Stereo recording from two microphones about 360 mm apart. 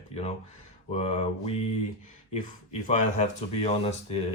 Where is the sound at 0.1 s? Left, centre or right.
Centre.